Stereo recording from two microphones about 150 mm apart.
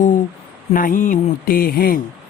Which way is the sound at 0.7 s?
65° left (ahead or behind).